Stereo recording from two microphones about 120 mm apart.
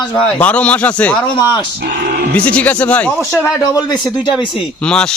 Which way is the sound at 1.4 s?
35° left (ahead or behind).